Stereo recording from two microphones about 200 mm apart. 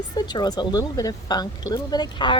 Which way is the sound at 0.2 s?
20° left (ahead or behind).